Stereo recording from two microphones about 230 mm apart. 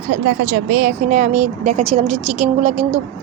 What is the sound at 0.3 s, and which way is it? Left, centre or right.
A woman's voice, right.